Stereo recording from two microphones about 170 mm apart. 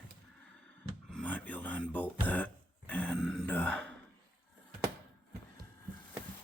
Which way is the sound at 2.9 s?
10° left (ahead or behind).